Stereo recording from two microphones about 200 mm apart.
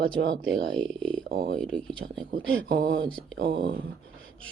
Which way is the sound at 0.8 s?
5° left (ahead or behind).